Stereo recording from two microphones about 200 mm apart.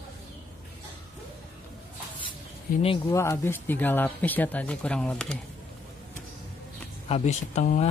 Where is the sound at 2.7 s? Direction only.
45° left (ahead or behind).